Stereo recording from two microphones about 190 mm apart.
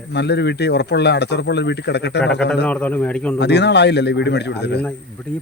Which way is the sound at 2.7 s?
5° left (ahead or behind).